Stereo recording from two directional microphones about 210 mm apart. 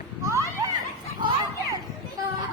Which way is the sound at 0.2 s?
15° right (ahead or behind).